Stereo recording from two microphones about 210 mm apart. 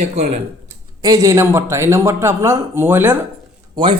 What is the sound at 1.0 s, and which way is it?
Speech, 15° right (ahead or behind).